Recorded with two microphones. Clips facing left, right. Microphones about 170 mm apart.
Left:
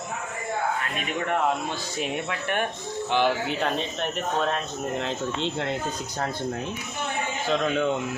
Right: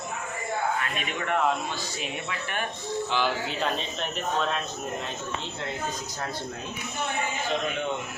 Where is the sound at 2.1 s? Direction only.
60° left (ahead or behind).